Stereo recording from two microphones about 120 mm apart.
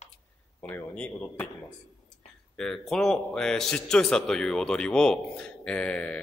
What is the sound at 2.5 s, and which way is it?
A man's voice, centre (ahead or behind).